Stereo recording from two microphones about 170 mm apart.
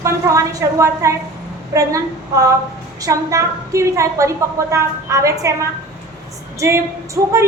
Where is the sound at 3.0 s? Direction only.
20° right (ahead or behind).